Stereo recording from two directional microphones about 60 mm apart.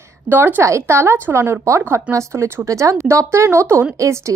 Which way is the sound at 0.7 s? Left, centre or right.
Right.